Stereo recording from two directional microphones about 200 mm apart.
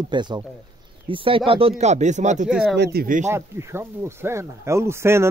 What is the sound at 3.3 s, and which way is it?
Speech, 15° right (ahead or behind).